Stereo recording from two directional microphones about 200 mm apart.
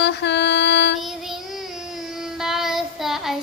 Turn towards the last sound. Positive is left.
turn(degrees=0)  # may be behind; listen again after turning